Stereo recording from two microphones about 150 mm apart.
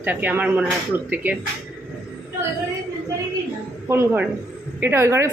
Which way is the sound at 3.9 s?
15° right (ahead or behind).